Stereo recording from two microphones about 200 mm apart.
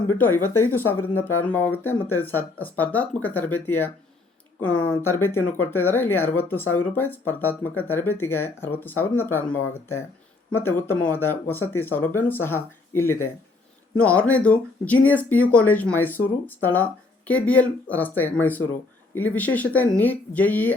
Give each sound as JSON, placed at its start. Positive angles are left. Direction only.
{"t": 0.1, "sound": "speech", "side_deg": 10}
{"t": 5.2, "sound": "speech", "side_deg": 10}